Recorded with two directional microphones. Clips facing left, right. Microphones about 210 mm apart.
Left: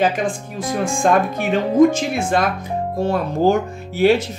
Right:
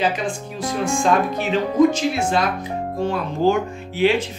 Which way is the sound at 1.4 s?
50° left (ahead or behind).